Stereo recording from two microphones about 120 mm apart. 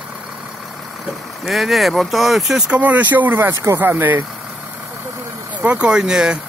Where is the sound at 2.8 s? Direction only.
15° right (ahead or behind).